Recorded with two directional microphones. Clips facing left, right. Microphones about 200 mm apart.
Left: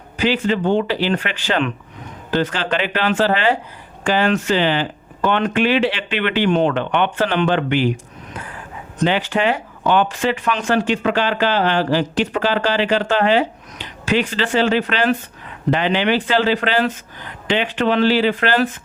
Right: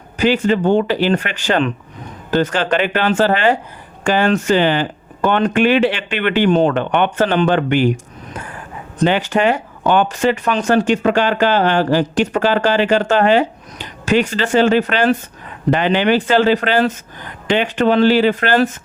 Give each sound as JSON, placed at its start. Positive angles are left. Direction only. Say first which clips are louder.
{"t": 0.2, "sound": "speech", "louder": "right 3 dB", "side_deg": -45}
{"t": 9.0, "sound": "speech", "louder": "right 3 dB", "side_deg": -45}